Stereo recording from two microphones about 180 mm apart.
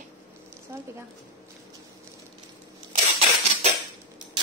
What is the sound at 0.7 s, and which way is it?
Speech, 15° right (ahead or behind).